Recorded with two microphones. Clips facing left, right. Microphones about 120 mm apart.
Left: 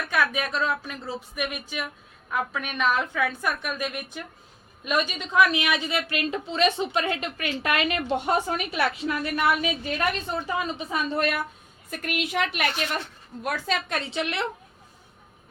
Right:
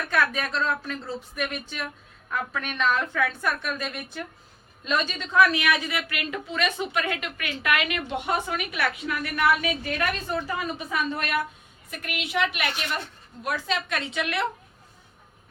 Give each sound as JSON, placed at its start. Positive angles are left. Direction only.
{"t": 0.1, "sound": "a woman's voice", "side_deg": 10}
{"t": 11.1, "sound": "a woman's voice", "side_deg": 35}